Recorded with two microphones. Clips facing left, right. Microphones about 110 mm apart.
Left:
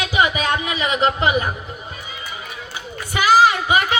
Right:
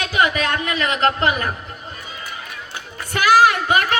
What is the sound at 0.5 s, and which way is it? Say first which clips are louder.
Speech: left 1 dB; 10° left (ahead or behind).